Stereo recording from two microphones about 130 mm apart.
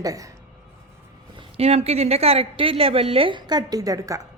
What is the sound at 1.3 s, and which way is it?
A woman's voice, 50° right (ahead or behind).